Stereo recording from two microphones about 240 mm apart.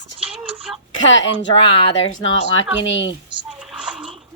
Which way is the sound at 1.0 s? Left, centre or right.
Left.